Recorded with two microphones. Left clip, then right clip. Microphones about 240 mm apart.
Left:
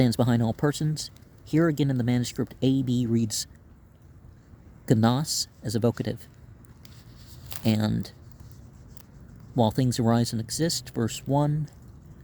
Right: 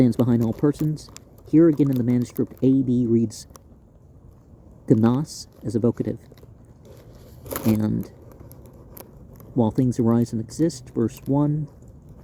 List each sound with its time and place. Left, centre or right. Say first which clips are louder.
0.0 s speech: right 4 dB; left
4.9 s speech: right 4 dB; left
7.7 s speech: right 3 dB; left
9.6 s speech: right 3 dB; left